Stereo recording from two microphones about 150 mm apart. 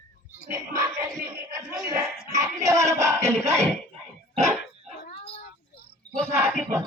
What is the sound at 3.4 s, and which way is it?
Speech, 50° right (ahead or behind).